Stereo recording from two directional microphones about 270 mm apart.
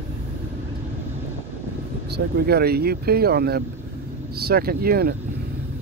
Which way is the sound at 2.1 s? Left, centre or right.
Right.